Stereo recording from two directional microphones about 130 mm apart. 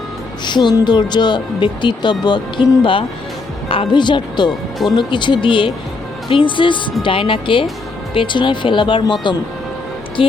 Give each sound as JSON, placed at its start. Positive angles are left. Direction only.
{"t": 0.4, "sound": "a woman's voice", "side_deg": 35}
{"t": 10.2, "sound": "speech", "side_deg": 45}